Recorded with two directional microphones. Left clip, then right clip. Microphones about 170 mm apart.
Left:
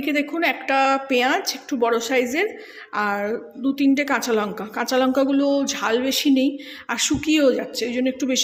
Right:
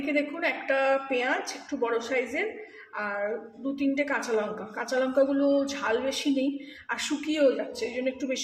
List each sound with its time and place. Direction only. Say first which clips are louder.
0.0 s a woman's voice: left 6 dB; 70° left (ahead or behind)
6.8 s a woman's voice: left 8 dB; 65° left (ahead or behind)